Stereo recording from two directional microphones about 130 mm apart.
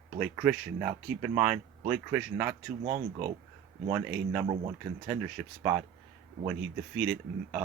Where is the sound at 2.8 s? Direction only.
50° right (ahead or behind).